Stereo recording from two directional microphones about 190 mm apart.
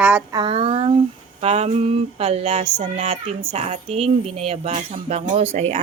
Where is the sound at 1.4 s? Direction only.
35° right (ahead or behind).